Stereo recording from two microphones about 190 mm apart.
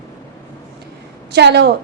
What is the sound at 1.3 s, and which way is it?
Speech, 65° right (ahead or behind).